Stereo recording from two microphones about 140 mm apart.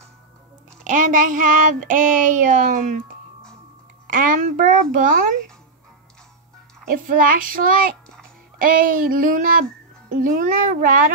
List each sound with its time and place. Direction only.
0.8 s speech: 70° right (ahead or behind)
4.1 s speech: 75° right (ahead or behind)
6.9 s speech: 80° right